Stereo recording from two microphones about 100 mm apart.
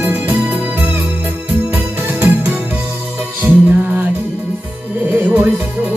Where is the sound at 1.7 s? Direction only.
20° right (ahead or behind).